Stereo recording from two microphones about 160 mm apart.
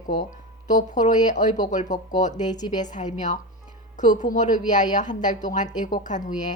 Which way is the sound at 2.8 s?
50° left (ahead or behind).